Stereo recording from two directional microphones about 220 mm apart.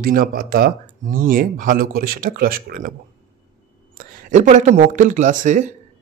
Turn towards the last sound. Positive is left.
turn(degrees=-35)  # may be behind; listen again after turning